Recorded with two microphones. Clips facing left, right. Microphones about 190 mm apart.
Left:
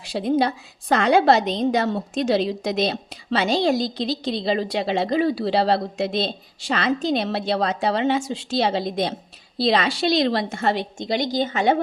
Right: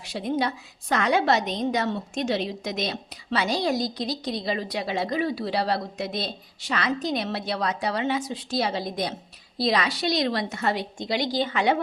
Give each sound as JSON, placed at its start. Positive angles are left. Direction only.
{"t": 0.0, "sound": "a woman's voice", "side_deg": 30}
{"t": 11.3, "sound": "speech", "side_deg": 45}